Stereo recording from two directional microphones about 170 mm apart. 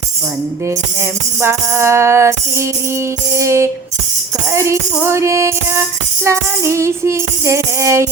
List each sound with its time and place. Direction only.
1.4 s music: 15° right (ahead or behind)